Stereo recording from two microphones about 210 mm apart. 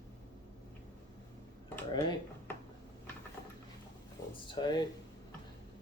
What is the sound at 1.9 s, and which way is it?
Speech, 20° left (ahead or behind).